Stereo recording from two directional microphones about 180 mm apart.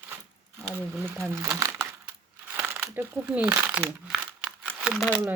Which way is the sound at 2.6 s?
10° right (ahead or behind).